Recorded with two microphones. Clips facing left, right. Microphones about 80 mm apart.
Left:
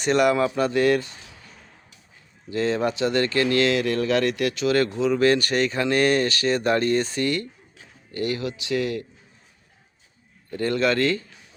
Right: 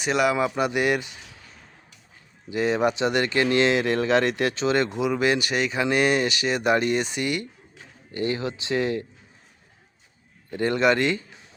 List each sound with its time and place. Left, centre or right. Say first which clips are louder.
0.0 s speech: left 3 dB; centre
2.5 s speech: right 1 dB; centre
10.5 s a man's voice: right 1 dB; right